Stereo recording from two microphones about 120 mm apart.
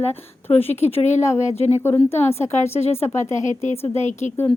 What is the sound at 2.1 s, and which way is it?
Speech, 20° left (ahead or behind).